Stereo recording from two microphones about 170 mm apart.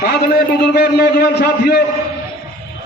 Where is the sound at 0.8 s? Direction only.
70° left (ahead or behind).